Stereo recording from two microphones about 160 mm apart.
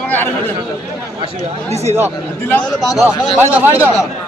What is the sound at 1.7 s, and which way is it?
Speech, 40° right (ahead or behind).